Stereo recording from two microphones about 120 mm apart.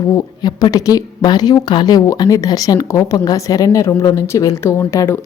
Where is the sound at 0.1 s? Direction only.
30° left (ahead or behind).